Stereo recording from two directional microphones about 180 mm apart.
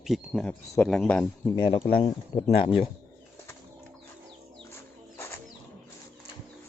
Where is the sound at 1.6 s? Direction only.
30° left (ahead or behind).